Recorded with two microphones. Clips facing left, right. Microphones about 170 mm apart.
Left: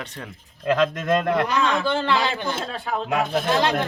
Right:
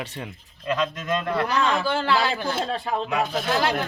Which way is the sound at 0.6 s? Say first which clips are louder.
Left 5 dB; 90° left.